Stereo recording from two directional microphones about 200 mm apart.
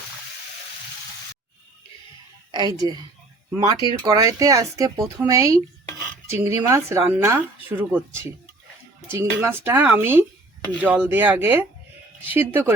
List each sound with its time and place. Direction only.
2.5 s a woman's voice: 20° right (ahead or behind)